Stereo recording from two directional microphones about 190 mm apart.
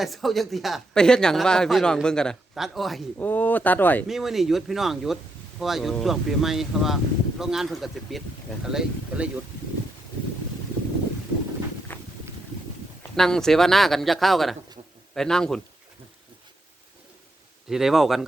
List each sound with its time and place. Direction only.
0.0 s speech: centre (ahead or behind)
4.0 s speech: centre (ahead or behind)
11.9 s a sound: 10° left (ahead or behind)
13.0 s speech: 5° left (ahead or behind)
17.7 s speech: centre (ahead or behind)